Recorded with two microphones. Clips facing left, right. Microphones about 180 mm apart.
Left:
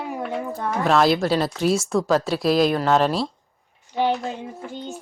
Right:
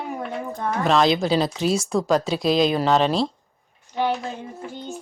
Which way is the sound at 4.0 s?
15° left (ahead or behind).